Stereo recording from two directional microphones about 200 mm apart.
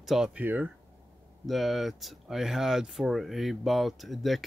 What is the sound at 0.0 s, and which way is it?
Speech, centre (ahead or behind).